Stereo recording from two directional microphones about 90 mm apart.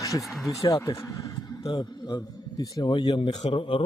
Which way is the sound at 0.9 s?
35° left (ahead or behind).